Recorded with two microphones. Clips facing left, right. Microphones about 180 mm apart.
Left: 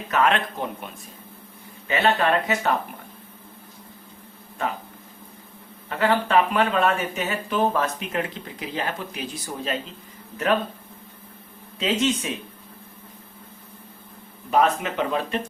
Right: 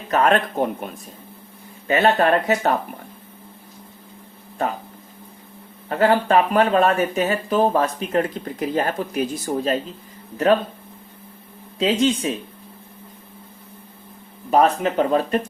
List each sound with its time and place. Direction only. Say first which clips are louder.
0.1 s speech: right 4 dB; 40° right (ahead or behind)
1.9 s speech: right 4 dB; 45° right (ahead or behind)
5.9 s speech: right 4 dB; 40° right (ahead or behind)
10.3 s speech: right 5 dB; 35° right (ahead or behind)
11.8 s speech: right 4 dB; 35° right (ahead or behind)
14.5 s speech: right 4 dB; 40° right (ahead or behind)